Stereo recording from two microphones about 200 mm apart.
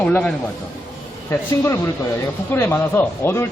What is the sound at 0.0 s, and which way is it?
Speech, 10° left (ahead or behind).